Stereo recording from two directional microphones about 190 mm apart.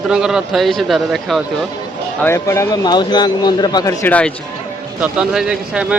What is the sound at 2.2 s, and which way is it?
Speech, 15° left (ahead or behind).